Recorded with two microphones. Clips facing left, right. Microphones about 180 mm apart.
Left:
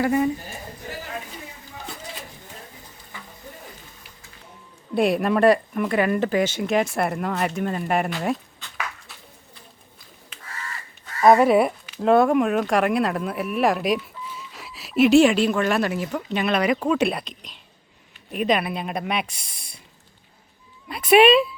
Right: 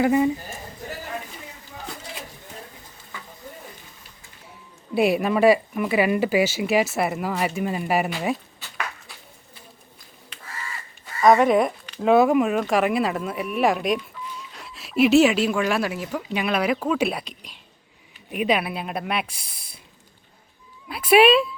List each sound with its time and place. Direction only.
0.0 s speech: 15° right (ahead or behind)
4.9 s speech: 5° right (ahead or behind)
11.0 s speech: 5° left (ahead or behind)
20.8 s speech: 5° right (ahead or behind)